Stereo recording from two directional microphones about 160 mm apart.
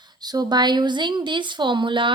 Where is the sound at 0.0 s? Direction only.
25° right (ahead or behind).